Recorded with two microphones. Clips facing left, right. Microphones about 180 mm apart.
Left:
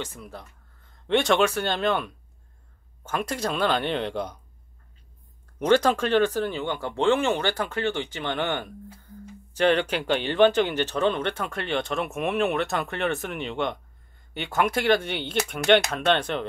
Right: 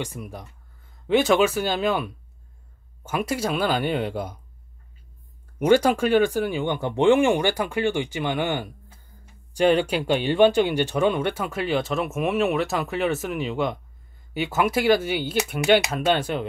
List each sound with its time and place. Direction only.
0.0 s speech: 15° right (ahead or behind)
5.6 s speech: 10° right (ahead or behind)